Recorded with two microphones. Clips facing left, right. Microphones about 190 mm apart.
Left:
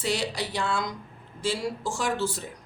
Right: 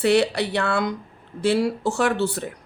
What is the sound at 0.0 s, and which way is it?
Speech, 65° right (ahead or behind).